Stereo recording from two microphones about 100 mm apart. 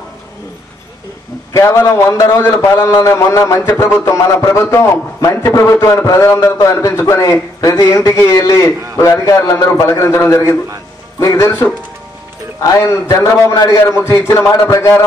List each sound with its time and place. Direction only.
1.5 s a man's voice: 30° left (ahead or behind)
12.5 s a man's voice: 30° left (ahead or behind)